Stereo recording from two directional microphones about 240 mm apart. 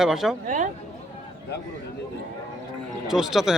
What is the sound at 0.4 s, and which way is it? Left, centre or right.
Speech, right.